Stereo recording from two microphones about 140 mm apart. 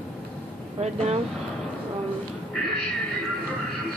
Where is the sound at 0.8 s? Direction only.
50° right (ahead or behind).